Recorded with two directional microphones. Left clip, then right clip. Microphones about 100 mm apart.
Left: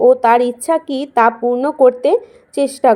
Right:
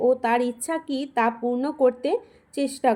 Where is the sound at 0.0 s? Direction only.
40° left (ahead or behind).